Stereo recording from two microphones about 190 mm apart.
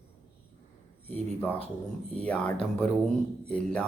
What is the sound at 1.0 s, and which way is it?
Speech, 10° left (ahead or behind).